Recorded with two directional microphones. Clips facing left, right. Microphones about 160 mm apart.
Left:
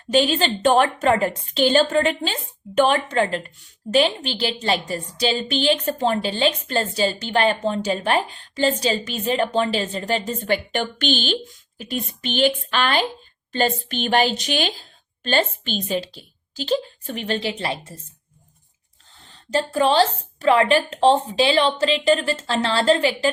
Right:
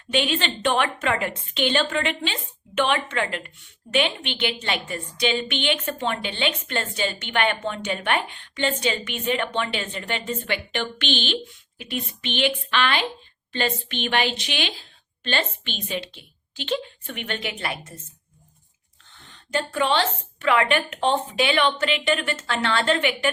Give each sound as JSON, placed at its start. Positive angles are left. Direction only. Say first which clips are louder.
{"t": 0.1, "sound": "a woman's voice", "louder": "left 5 dB", "side_deg": 35}
{"t": 19.1, "sound": "a woman's voice", "louder": "left 4 dB", "side_deg": 35}